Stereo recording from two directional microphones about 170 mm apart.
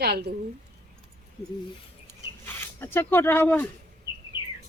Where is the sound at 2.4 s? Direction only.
10° left (ahead or behind).